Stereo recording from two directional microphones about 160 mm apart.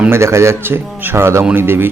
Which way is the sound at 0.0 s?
15° right (ahead or behind).